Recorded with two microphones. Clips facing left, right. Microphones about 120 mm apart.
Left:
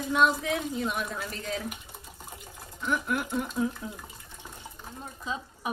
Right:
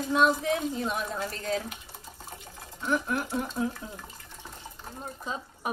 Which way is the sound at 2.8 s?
30° right (ahead or behind).